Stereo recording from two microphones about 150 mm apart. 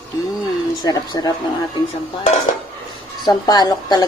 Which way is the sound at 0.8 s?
25° left (ahead or behind).